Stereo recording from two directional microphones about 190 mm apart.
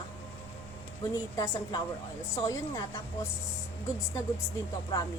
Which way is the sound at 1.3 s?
20° left (ahead or behind).